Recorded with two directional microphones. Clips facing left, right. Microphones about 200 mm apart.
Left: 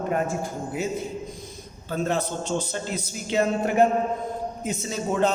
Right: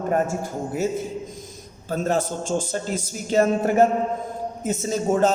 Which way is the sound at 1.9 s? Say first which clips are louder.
Right 2 dB; 45° right (ahead or behind).